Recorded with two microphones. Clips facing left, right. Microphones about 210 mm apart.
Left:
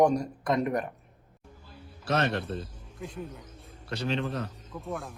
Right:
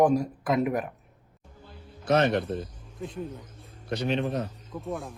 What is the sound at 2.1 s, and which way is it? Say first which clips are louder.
Speech: right 5 dB; 25° right (ahead or behind).